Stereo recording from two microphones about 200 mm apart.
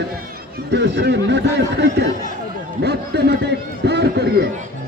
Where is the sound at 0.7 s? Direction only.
60° right (ahead or behind).